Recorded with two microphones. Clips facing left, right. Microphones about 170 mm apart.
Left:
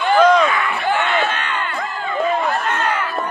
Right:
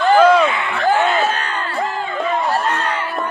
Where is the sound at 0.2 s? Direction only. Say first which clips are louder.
Even; 5° right (ahead or behind).